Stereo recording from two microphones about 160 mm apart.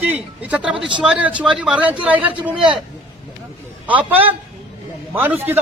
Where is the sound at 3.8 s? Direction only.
10° right (ahead or behind).